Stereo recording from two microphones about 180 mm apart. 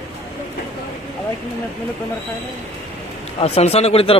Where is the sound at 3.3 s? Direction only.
35° left (ahead or behind).